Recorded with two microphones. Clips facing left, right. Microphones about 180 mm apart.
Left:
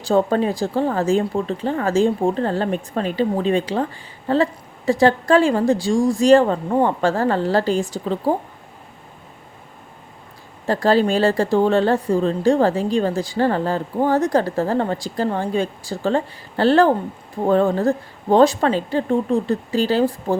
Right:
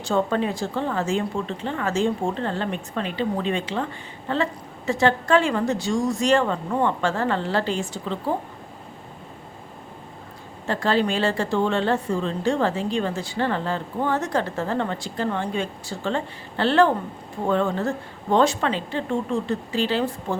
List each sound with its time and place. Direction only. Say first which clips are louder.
0.1 s speech: left 5 dB; 35° left (ahead or behind)
10.7 s speech: left 5 dB; 40° left (ahead or behind)